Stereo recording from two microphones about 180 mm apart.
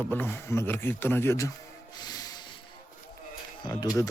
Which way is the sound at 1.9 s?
20° left (ahead or behind).